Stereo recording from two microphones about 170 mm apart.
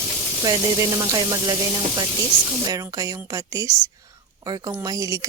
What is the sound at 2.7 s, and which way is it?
A woman's voice, 20° right (ahead or behind).